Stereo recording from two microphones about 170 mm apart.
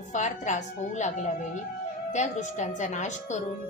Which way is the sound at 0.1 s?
45° left (ahead or behind).